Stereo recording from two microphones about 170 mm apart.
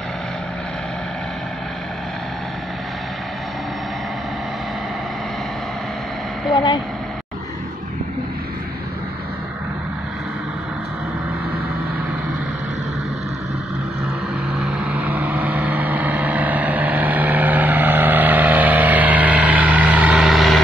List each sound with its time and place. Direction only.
14.5 s vehicle: 5° right (ahead or behind)